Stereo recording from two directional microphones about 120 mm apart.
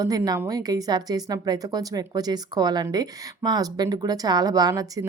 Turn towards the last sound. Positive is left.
turn(degrees=-30)  # may be behind; listen again after turning